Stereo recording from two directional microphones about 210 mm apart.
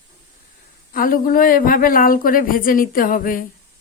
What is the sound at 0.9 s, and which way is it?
Speech, 40° left (ahead or behind).